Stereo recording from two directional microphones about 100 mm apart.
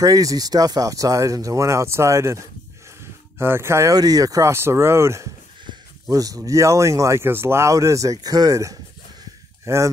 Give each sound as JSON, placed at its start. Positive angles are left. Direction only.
{"t": 0.0, "sound": "speech", "side_deg": -35}